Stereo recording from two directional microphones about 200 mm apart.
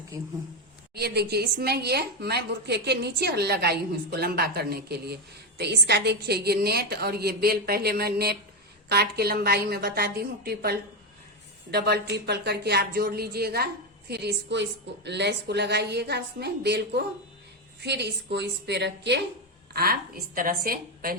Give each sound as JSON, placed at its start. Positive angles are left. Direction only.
{"t": 0.9, "sound": "a woman's voice", "side_deg": -55}